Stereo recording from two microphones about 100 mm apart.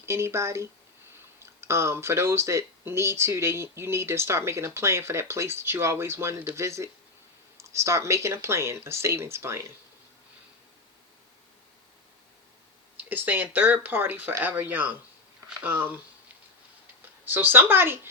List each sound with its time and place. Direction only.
0.0 s speech: 25° right (ahead or behind)
13.0 s speech: 20° right (ahead or behind)
17.2 s speech: 20° right (ahead or behind)